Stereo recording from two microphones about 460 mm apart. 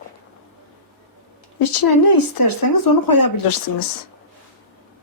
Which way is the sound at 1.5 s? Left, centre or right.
Left.